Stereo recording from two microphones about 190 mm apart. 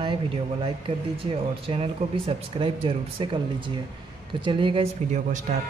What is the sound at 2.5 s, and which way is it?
Speech, 25° right (ahead or behind).